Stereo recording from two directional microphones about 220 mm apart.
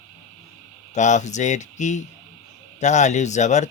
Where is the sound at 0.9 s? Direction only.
35° left (ahead or behind).